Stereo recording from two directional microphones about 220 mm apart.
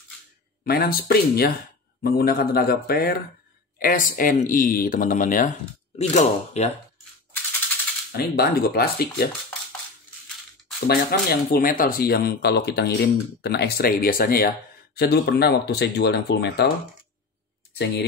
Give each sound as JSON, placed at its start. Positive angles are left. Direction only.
{"t": 0.7, "sound": "speech", "side_deg": 45}
{"t": 8.2, "sound": "speech", "side_deg": 45}
{"t": 10.9, "sound": "speech", "side_deg": 45}